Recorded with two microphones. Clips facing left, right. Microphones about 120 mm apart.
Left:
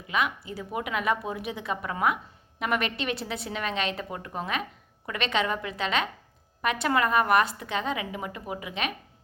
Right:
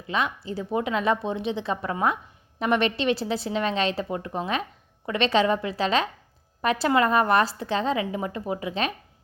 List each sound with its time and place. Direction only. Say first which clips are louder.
0.1 s a woman's voice: right 2 dB; 30° right (ahead or behind)